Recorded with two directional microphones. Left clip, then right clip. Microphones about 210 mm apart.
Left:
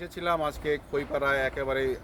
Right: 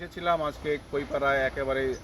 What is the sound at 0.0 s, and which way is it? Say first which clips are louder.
Speech: right 1 dB; 20° left (ahead or behind).